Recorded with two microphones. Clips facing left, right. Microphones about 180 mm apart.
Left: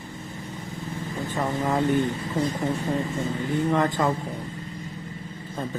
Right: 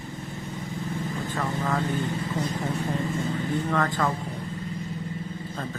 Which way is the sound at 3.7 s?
20° left (ahead or behind).